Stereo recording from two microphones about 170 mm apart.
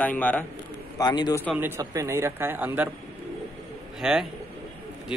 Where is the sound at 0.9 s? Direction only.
25° left (ahead or behind).